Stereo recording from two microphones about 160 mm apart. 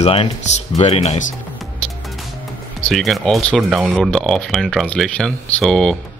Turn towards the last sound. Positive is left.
turn(degrees=5)  # may be behind; listen again after turning